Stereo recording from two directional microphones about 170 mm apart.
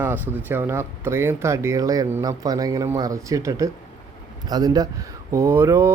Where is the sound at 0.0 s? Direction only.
10° right (ahead or behind).